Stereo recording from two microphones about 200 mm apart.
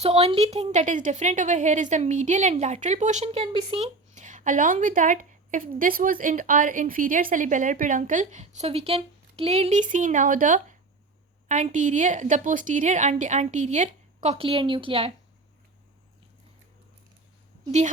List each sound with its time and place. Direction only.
0.0 s a woman's voice: 30° right (ahead or behind)